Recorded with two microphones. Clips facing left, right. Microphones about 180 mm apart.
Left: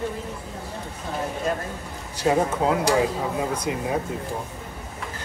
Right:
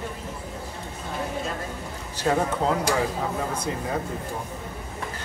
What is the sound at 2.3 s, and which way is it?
Speech, 15° left (ahead or behind).